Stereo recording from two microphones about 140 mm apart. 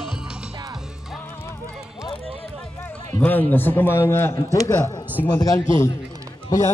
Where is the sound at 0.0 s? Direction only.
5° right (ahead or behind).